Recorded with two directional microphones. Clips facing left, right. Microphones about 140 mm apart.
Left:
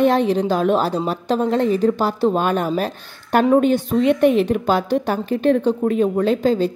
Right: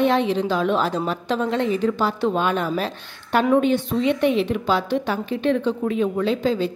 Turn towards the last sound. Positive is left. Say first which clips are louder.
# left 4 dB
turn(degrees=45)  # may be behind; listen again after turning